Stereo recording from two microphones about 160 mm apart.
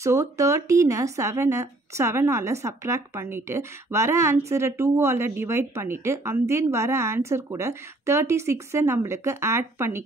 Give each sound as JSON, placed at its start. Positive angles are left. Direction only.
{"t": 0.0, "sound": "speech", "side_deg": -20}